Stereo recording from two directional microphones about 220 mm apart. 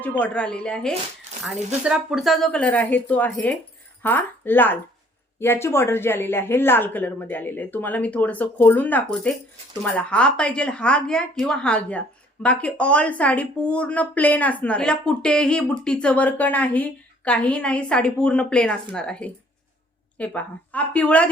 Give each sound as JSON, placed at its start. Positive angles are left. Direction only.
{"t": 0.0, "sound": "a woman's voice", "side_deg": 5}